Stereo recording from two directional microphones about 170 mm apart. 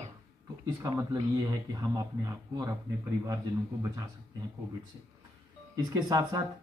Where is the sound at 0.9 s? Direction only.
20° right (ahead or behind).